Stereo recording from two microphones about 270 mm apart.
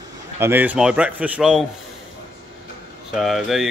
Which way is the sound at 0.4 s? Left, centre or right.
Centre.